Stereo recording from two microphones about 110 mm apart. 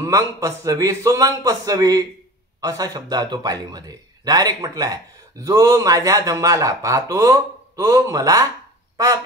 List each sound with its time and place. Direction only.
0.0 s a man's voice: 30° right (ahead or behind)